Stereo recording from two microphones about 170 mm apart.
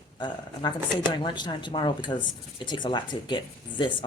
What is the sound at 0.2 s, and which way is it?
Speech, 25° left (ahead or behind).